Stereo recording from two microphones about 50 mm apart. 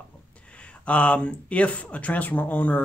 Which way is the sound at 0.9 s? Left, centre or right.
Left.